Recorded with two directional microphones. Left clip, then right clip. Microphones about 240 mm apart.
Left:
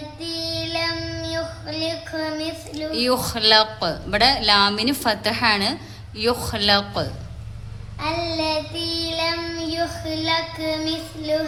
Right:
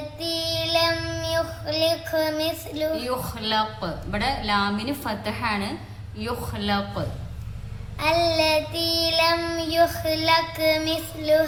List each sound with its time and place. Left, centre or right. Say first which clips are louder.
0.3 s child singing: right 2 dB; centre
2.9 s a woman's voice: left 6 dB; left
7.9 s child singing: right 4 dB; centre